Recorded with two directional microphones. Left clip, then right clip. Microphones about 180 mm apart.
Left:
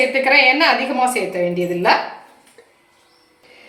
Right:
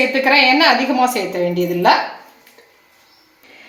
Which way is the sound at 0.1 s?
35° right (ahead or behind).